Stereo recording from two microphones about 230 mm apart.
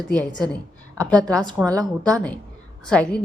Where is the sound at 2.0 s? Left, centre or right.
Centre.